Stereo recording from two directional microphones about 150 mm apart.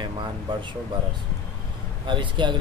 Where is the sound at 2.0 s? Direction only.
30° right (ahead or behind).